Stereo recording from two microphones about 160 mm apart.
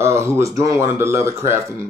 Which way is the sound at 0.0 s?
15° right (ahead or behind).